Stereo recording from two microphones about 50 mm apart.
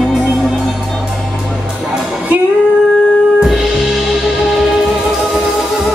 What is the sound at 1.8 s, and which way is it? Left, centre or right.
Music, centre.